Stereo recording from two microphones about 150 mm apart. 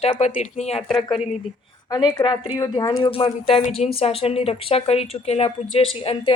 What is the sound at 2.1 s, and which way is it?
Speech, 35° left (ahead or behind).